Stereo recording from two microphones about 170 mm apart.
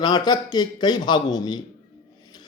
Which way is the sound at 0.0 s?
25° left (ahead or behind).